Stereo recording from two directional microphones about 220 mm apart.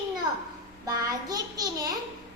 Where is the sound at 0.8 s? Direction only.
15° right (ahead or behind).